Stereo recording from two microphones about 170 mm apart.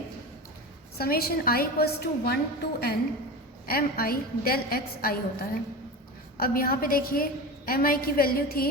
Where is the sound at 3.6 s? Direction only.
60° left (ahead or behind).